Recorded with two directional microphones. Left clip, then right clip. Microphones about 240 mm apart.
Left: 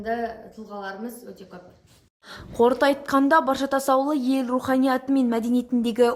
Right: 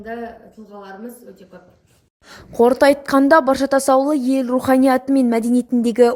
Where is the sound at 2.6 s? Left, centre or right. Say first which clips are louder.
Right 6 dB; right.